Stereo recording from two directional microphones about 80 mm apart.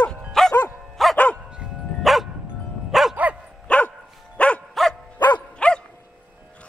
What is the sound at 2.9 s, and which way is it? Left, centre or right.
Dog, centre.